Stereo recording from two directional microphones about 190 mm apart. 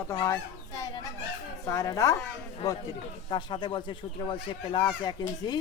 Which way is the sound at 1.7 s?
15° left (ahead or behind).